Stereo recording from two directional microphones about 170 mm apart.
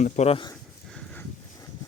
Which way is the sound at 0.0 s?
40° left (ahead or behind).